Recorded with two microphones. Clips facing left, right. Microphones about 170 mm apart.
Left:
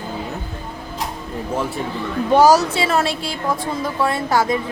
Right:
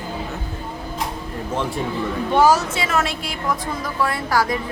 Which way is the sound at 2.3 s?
40° left (ahead or behind).